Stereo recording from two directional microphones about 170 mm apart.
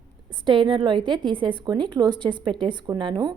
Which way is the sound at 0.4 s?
30° right (ahead or behind).